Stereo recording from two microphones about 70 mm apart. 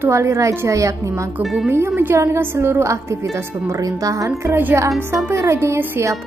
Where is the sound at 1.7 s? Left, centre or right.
Right.